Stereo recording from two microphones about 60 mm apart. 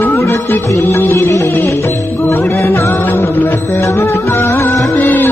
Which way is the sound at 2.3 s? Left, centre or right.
Left.